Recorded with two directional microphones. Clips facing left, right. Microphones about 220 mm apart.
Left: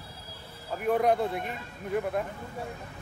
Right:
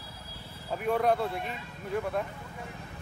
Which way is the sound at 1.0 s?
15° left (ahead or behind).